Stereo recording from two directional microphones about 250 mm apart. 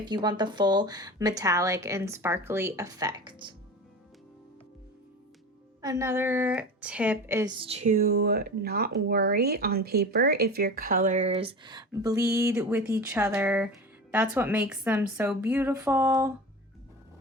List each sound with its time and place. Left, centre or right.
0.0 s a woman's voice: centre
5.8 s a woman's voice: centre